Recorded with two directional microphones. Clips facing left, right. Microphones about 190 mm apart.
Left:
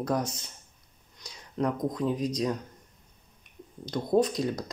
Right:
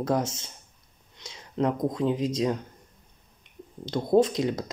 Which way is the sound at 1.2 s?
25° right (ahead or behind).